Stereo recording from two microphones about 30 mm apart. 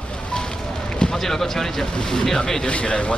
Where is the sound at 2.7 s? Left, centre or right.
Left.